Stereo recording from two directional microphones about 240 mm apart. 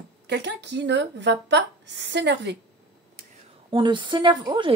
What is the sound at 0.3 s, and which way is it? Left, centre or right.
Speech, right.